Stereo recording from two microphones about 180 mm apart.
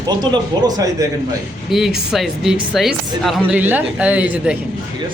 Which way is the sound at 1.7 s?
Centre (ahead or behind).